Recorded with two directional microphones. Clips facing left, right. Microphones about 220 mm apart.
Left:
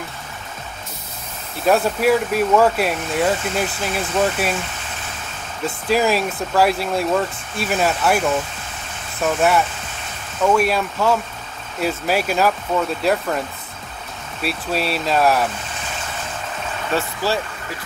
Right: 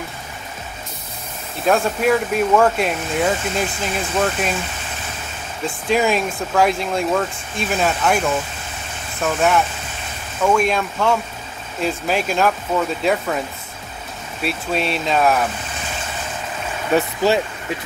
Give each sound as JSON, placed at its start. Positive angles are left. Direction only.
{"t": 1.7, "sound": "speech", "side_deg": 5}
{"t": 5.9, "sound": "speech", "side_deg": 5}
{"t": 9.2, "sound": "speech", "side_deg": 5}
{"t": 14.4, "sound": "speech", "side_deg": 0}
{"t": 16.9, "sound": "speech", "side_deg": -20}